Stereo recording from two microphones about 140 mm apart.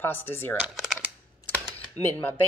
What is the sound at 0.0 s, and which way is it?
Speech, 15° left (ahead or behind).